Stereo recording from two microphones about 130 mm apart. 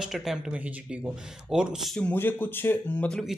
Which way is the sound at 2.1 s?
15° left (ahead or behind).